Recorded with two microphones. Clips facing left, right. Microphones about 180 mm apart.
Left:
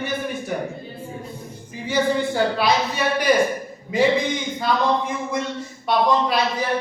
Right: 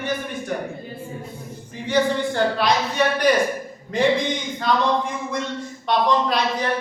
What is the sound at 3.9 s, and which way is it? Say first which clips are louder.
Speech: left 1 dB; 5° left (ahead or behind).